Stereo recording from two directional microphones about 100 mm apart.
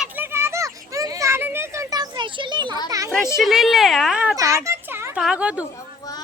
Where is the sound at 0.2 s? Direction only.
25° right (ahead or behind); by 2.7 s 50° right (ahead or behind).